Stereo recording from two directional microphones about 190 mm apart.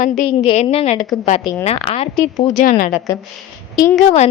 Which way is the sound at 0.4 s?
35° left (ahead or behind).